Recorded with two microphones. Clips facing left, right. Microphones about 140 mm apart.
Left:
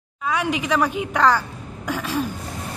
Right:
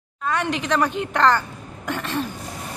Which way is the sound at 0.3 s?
5° left (ahead or behind).